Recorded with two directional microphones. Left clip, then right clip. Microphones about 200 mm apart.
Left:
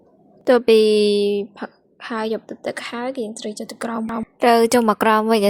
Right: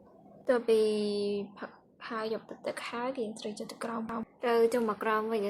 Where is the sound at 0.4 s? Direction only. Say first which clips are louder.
Left 13 dB; 45° left (ahead or behind).